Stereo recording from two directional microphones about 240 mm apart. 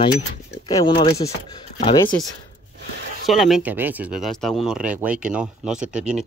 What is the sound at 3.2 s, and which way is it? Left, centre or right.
Speech, centre.